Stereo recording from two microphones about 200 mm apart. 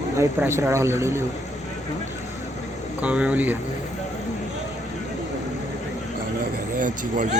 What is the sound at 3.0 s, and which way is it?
Speech, 5° right (ahead or behind).